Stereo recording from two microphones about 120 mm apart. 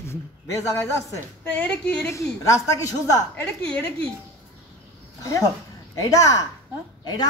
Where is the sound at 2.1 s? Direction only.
25° left (ahead or behind).